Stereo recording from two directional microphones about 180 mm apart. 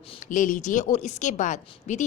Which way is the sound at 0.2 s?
45° left (ahead or behind).